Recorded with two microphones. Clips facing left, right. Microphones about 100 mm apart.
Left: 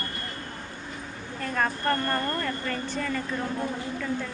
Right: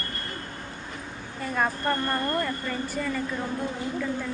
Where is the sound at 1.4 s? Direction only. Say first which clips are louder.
Right 1 dB; 5° right (ahead or behind).